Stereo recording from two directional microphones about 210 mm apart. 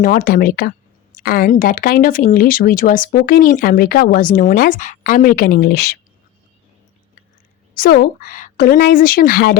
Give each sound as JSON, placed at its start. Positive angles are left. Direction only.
{"t": 0.0, "sound": "speech", "side_deg": 40}
{"t": 7.7, "sound": "speech", "side_deg": 45}